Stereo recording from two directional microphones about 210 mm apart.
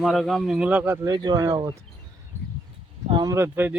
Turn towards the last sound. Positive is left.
turn(degrees=-10)  # may be behind; listen again after turning